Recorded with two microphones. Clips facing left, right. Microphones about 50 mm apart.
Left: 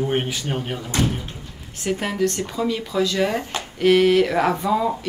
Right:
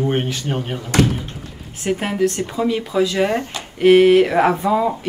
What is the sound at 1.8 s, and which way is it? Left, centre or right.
A woman's voice, centre.